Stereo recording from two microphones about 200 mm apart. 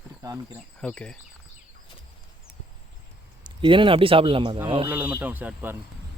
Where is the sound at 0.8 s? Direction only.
5° left (ahead or behind).